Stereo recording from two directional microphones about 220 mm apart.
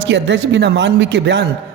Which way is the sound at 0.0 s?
55° right (ahead or behind).